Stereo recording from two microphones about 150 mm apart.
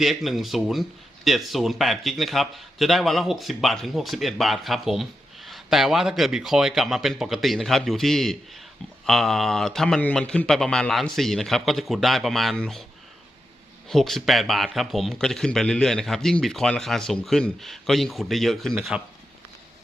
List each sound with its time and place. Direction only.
0.0 s speech: centre (ahead or behind)
13.8 s speech: centre (ahead or behind)